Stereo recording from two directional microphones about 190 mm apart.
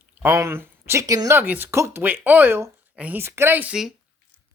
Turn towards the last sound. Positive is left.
turn(degrees=-5)  # may be behind; listen again after turning